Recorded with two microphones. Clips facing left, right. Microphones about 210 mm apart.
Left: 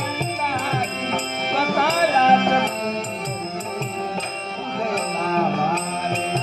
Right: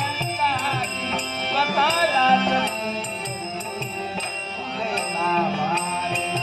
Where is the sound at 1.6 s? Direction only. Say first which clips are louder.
Left 2 dB; 50° left (ahead or behind).